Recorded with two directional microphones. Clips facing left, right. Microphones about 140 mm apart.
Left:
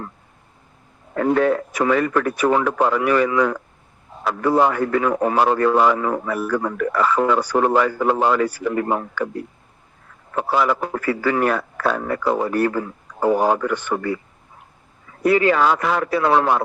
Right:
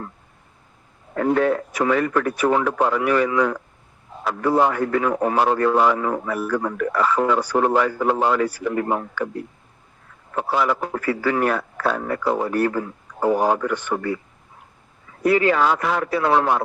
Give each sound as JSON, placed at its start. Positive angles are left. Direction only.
{"t": 1.2, "sound": "speech", "side_deg": 90}
{"t": 10.3, "sound": "speech", "side_deg": 90}
{"t": 15.3, "sound": "speech", "side_deg": 90}